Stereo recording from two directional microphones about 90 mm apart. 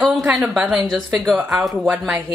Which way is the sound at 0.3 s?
5° right (ahead or behind).